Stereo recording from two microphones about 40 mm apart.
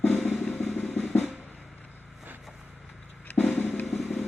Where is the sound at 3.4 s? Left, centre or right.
Left.